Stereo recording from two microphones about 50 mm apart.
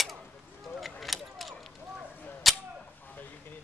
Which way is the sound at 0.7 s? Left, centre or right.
Centre.